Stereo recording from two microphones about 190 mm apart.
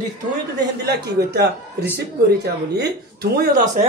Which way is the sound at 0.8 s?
60° right (ahead or behind).